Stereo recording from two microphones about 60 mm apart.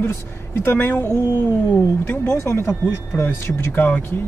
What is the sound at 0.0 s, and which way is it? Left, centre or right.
Speech, left.